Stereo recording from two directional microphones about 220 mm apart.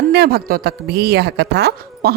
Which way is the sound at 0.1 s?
45° right (ahead or behind).